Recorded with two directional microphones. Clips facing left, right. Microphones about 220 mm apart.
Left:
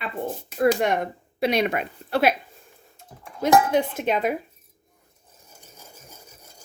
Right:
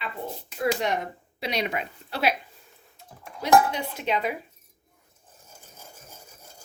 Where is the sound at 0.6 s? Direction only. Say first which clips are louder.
Left 5 dB; 55° left (ahead or behind).